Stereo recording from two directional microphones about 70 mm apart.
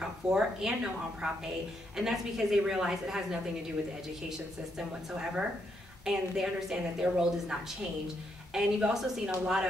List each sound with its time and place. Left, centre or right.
0.0 s a woman's voice: centre
4.7 s a woman's voice: centre
8.5 s a woman's voice: centre